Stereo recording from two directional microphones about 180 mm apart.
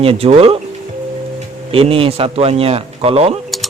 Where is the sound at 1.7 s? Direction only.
30° right (ahead or behind).